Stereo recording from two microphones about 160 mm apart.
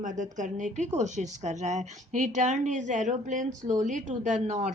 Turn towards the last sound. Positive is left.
turn(degrees=-45)  # may be behind; listen again after turning